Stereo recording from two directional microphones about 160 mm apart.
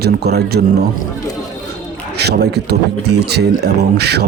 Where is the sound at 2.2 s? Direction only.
90° right.